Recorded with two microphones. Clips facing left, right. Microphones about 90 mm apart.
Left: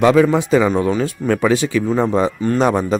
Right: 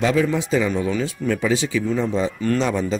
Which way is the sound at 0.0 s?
65° left (ahead or behind).